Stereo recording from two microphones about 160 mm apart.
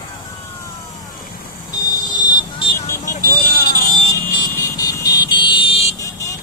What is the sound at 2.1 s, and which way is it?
Vehicle, 30° left (ahead or behind).